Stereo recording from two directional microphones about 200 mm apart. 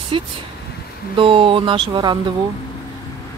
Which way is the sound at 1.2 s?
25° right (ahead or behind).